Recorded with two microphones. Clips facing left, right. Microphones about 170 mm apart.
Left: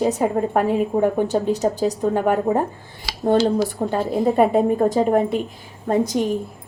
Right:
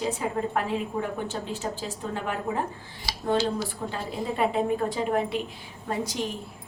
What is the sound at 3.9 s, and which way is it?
A woman's voice, 50° left (ahead or behind).